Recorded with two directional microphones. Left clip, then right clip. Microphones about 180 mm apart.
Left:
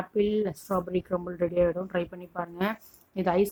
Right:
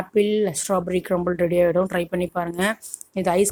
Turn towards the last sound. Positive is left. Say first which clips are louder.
# right 5 dB
turn(degrees=-10)  # may be behind; listen again after turning